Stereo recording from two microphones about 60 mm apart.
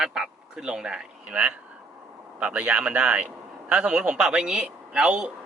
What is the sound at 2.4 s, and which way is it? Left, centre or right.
Speech, centre.